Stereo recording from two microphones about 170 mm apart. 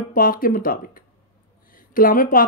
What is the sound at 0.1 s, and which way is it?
Speech, 55° left (ahead or behind).